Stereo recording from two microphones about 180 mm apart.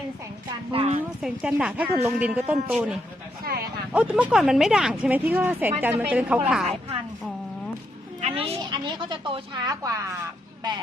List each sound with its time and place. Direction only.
0.7 s a woman's voice: 30° right (ahead or behind)
1.2 s a woman's voice: 5° right (ahead or behind)
3.4 s a sound: 60° right (ahead or behind)
3.9 s speech: 5° right (ahead or behind)
8.2 s a woman's voice: 30° right (ahead or behind)